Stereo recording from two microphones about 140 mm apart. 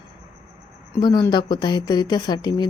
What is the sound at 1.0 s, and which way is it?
Speech, 30° left (ahead or behind).